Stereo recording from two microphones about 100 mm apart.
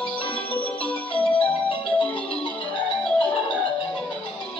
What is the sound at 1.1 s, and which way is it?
Marimba, 60° left (ahead or behind).